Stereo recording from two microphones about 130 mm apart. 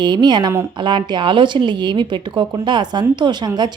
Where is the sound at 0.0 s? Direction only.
35° right (ahead or behind).